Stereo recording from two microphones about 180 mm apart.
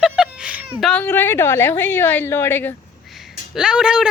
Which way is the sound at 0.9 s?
10° left (ahead or behind).